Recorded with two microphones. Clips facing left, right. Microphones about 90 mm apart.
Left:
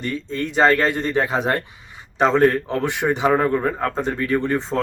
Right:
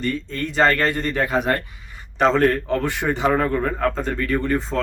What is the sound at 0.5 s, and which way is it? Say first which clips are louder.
Speech: left 2 dB; 15° left (ahead or behind).